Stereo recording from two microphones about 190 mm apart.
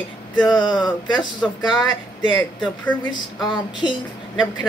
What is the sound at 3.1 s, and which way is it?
Speech, 25° left (ahead or behind).